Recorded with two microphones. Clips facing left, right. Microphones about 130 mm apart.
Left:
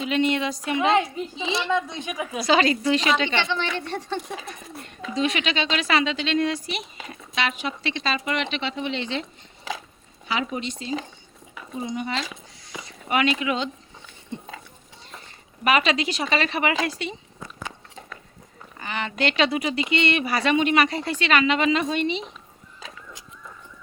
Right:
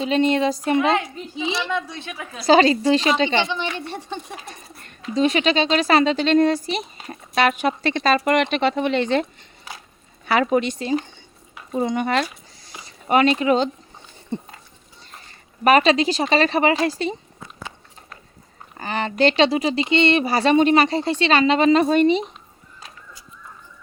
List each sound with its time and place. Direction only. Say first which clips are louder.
0.0 s speech: right 4 dB; 35° right (ahead or behind)
1.5 s a woman's voice: left 1 dB; 20° left (ahead or behind)
2.5 s speech: right 6 dB; 35° right (ahead or behind)
3.3 s a woman's voice: right 3 dB; 15° right (ahead or behind)
4.8 s speech: right 5 dB; 40° right (ahead or behind)
9.7 s a sound: left 7 dB; 90° left
10.2 s speech: right 9 dB; 60° right (ahead or behind)
12.6 s a sound: right 5 dB; 35° right (ahead or behind)
15.6 s speech: right 6 dB; 40° right (ahead or behind)
18.8 s speech: right 7 dB; 35° right (ahead or behind)